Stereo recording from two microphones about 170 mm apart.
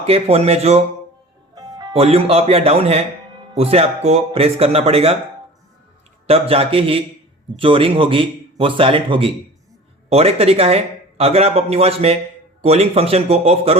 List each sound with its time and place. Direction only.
0.0 s a man's voice: 35° right (ahead or behind)
1.5 s music: 20° right (ahead or behind)
1.9 s a man's voice: 35° right (ahead or behind)
6.5 s a man's voice: 35° right (ahead or behind)